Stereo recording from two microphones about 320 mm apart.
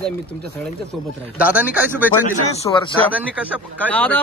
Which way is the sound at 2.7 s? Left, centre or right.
Centre.